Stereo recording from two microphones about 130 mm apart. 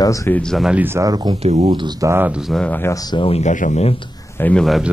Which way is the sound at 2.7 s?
15° left (ahead or behind).